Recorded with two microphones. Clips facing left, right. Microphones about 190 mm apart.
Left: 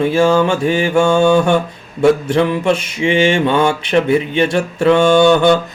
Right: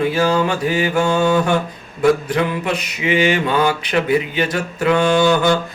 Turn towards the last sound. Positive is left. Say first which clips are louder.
# left 5 dB
turn(degrees=25)  # may be behind; listen again after turning